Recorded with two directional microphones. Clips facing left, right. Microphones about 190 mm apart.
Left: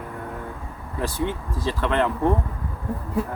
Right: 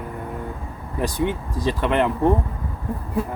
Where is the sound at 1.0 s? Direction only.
15° right (ahead or behind).